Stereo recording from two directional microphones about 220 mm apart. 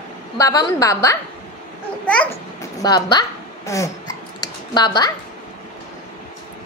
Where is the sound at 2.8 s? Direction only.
15° left (ahead or behind).